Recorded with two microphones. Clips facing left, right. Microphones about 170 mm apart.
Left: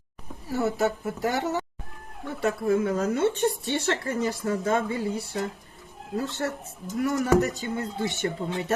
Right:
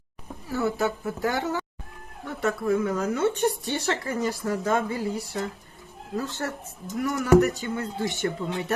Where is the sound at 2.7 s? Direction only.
35° left (ahead or behind).